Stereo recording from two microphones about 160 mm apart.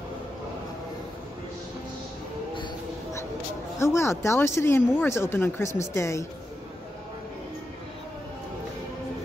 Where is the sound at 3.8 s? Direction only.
15° left (ahead or behind).